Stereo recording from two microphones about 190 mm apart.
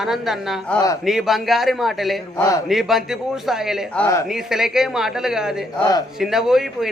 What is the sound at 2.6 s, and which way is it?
A man's voice, centre (ahead or behind).